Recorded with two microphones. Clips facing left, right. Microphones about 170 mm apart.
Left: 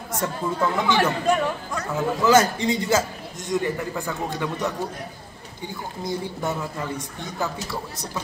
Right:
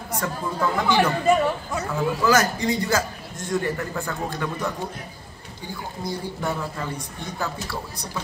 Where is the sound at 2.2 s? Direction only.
25° left (ahead or behind).